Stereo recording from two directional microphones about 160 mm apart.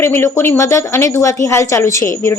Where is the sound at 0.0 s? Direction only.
15° left (ahead or behind).